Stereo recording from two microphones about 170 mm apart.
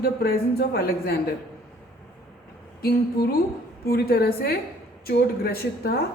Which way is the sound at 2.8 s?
65° left (ahead or behind).